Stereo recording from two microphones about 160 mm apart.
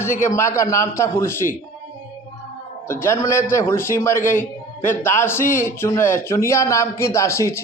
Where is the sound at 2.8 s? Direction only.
15° left (ahead or behind).